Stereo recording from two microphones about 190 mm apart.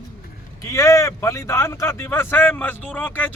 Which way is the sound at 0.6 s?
15° left (ahead or behind).